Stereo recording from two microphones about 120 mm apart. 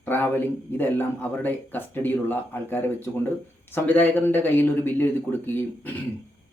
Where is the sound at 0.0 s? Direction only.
15° left (ahead or behind).